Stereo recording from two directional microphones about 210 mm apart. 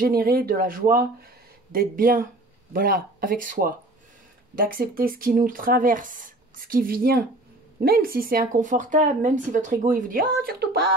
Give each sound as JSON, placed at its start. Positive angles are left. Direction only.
{"t": 0.0, "sound": "speech", "side_deg": -45}